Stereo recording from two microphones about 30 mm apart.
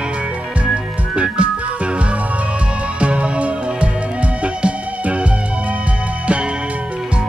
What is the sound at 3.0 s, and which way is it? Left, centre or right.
Music, right.